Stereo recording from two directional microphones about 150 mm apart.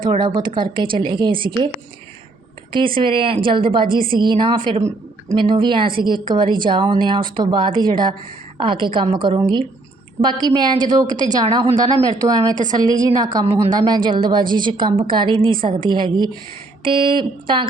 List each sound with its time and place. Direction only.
0.0 s a woman's voice: 30° right (ahead or behind)
2.7 s a woman's voice: 35° right (ahead or behind)